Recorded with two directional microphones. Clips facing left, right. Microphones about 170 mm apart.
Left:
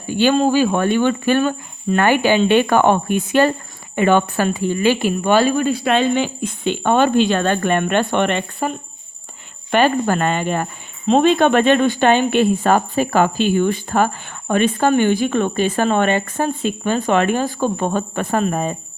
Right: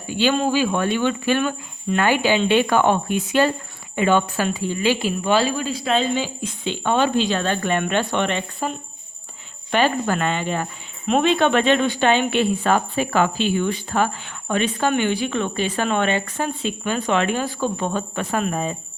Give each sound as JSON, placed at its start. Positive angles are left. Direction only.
{"t": 0.1, "sound": "speech", "side_deg": 50}
{"t": 9.7, "sound": "speech", "side_deg": 50}
{"t": 11.0, "sound": "speech", "side_deg": 30}
{"t": 11.3, "sound": "speech", "side_deg": 45}